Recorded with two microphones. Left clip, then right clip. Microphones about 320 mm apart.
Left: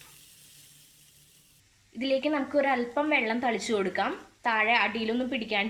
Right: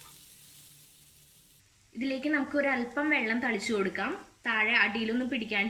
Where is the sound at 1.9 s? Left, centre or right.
Centre.